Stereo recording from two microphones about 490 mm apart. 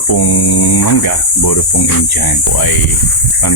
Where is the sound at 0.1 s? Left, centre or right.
Left.